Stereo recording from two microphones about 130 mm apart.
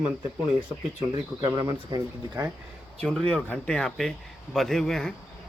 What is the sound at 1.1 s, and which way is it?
Speech, 35° right (ahead or behind).